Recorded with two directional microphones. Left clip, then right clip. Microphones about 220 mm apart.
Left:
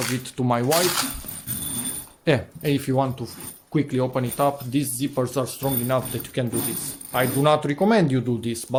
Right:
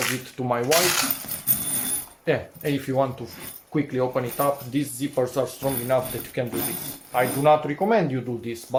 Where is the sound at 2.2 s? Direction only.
45° left (ahead or behind).